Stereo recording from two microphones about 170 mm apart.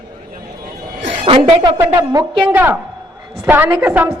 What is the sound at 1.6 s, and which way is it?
Speech, 20° right (ahead or behind).